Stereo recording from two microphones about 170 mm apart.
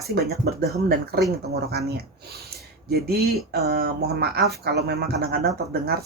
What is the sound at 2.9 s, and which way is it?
Speech, 65° right (ahead or behind).